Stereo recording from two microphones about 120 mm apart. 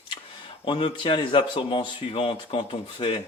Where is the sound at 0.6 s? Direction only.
50° left (ahead or behind).